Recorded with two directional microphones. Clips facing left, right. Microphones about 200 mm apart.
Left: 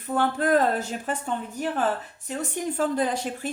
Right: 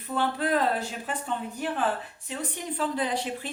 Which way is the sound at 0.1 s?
45° left (ahead or behind).